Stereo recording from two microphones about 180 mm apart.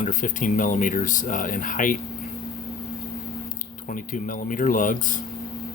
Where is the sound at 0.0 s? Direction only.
45° left (ahead or behind).